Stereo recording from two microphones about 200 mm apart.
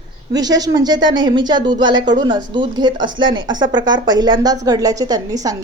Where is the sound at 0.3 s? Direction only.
20° right (ahead or behind).